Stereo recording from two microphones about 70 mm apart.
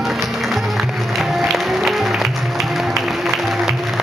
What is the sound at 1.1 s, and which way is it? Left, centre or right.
Music, centre.